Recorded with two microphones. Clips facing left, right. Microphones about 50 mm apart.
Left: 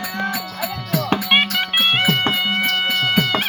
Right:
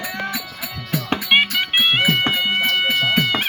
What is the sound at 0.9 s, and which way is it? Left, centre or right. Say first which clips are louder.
Music: even; right.